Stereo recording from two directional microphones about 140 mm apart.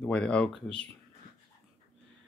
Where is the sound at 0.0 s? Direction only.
5° left (ahead or behind).